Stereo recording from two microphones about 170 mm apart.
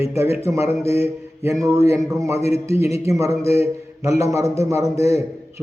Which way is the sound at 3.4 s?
35° left (ahead or behind).